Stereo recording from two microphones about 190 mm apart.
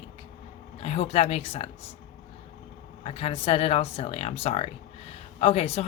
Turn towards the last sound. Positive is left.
turn(degrees=35)  # may be behind; listen again after turning